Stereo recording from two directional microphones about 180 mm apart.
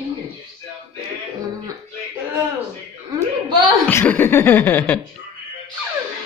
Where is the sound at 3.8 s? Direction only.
10° left (ahead or behind).